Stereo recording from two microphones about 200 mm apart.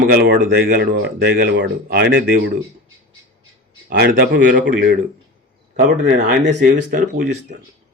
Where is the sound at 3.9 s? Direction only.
55° right (ahead or behind).